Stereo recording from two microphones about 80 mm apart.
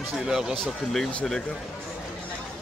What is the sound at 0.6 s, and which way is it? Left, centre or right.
Speech, centre.